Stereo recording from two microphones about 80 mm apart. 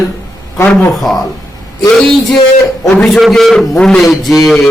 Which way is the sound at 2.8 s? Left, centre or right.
Centre.